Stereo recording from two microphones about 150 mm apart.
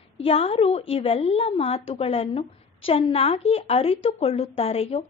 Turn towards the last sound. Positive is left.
turn(degrees=40)  # may be behind; listen again after turning